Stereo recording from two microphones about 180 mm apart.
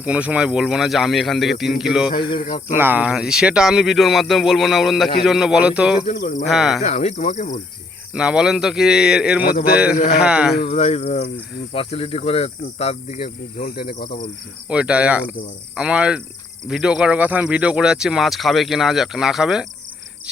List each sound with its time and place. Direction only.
0.0 s speech: 5° right (ahead or behind)
2.0 s speech: 25° left (ahead or behind)
2.7 s speech: 10° right (ahead or behind)
6.1 s speech: 55° left (ahead or behind)
6.5 s speech: centre (ahead or behind)
6.8 s speech: 40° left (ahead or behind)
8.1 s speech: 5° right (ahead or behind)
10.6 s speech: 35° left (ahead or behind)
13.2 s speech: 55° left (ahead or behind)
14.7 s speech: 5° right (ahead or behind)